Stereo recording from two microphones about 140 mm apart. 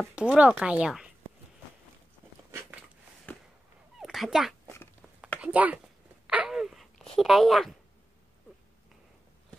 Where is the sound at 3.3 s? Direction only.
10° left (ahead or behind).